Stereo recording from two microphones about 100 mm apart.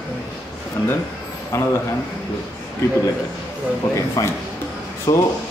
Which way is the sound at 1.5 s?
30° left (ahead or behind).